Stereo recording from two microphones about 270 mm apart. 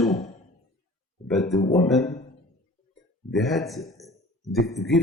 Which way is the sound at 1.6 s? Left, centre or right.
Left.